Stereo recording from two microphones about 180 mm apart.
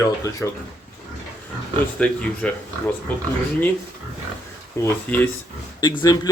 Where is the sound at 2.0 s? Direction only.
5° left (ahead or behind).